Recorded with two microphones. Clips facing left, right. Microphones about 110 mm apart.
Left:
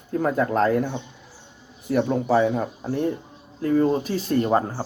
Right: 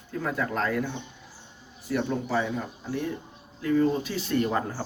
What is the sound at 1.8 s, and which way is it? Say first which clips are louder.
Speech: left 7 dB; 50° left (ahead or behind).